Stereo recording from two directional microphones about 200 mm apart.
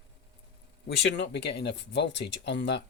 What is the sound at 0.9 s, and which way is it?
Speech, 55° left (ahead or behind).